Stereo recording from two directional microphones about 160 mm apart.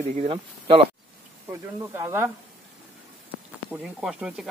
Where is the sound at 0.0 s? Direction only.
50° right (ahead or behind).